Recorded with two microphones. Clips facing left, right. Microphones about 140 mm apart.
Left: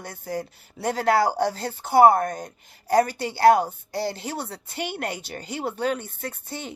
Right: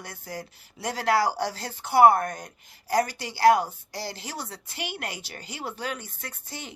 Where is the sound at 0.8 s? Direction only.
45° left (ahead or behind).